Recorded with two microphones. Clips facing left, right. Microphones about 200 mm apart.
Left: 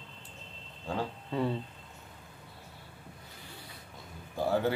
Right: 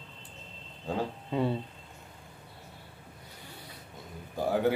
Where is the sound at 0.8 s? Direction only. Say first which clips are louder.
Right 2 dB; 15° right (ahead or behind).